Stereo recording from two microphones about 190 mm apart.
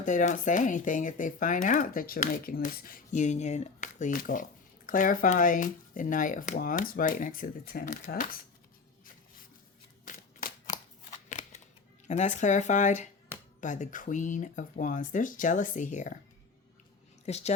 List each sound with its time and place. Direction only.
0.0 s speech: 40° left (ahead or behind)
11.3 s shuffling cards: 40° left (ahead or behind)
12.0 s speech: 35° left (ahead or behind)
17.2 s speech: 35° left (ahead or behind)